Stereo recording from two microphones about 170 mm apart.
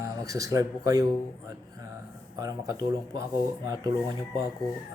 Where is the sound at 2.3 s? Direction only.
20° right (ahead or behind).